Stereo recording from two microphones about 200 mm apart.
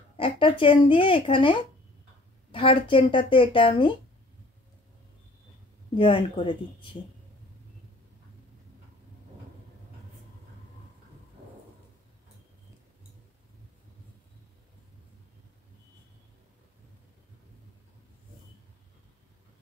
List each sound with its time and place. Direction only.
0.2 s a woman's voice: 25° left (ahead or behind)
5.9 s a woman's voice: 25° left (ahead or behind)